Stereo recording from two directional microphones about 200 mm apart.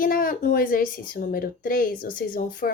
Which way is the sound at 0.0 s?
45° left (ahead or behind).